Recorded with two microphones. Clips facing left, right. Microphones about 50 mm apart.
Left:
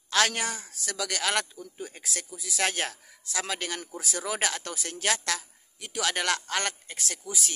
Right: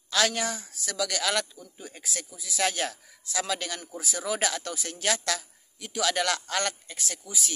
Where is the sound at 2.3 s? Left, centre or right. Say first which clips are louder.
Right 1 dB; left.